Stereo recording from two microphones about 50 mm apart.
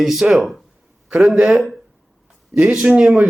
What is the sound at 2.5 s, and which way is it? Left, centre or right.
Speech, right.